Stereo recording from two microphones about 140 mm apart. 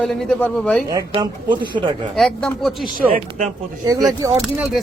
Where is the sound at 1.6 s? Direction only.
35° right (ahead or behind).